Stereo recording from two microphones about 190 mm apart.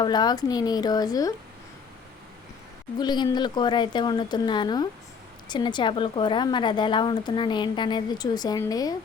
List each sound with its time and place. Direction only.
0.0 s a woman's voice: 20° left (ahead or behind)
3.0 s a woman's voice: 20° left (ahead or behind)